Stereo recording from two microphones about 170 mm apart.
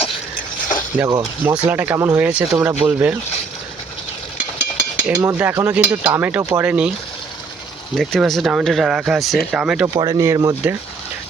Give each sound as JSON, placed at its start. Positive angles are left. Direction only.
{"t": 1.0, "sound": "speech", "side_deg": -20}
{"t": 1.6, "sound": "speech", "side_deg": -10}
{"t": 5.0, "sound": "speech", "side_deg": -10}
{"t": 7.9, "sound": "speech", "side_deg": 0}
{"t": 10.0, "sound": "speech", "side_deg": -20}